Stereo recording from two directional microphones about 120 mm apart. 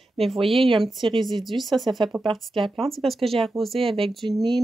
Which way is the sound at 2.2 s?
45° right (ahead or behind).